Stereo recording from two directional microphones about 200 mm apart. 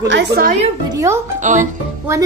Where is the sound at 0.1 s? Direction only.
60° right (ahead or behind).